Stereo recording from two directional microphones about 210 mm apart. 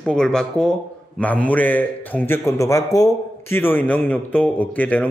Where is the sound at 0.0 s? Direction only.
5° left (ahead or behind).